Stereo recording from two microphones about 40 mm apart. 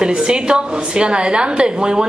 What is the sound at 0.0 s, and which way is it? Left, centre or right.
A woman's voice, right.